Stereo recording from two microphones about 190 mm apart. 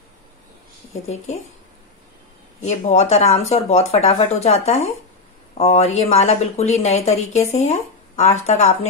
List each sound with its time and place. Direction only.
1.0 s speech: 35° left (ahead or behind)
2.6 s speech: 35° left (ahead or behind)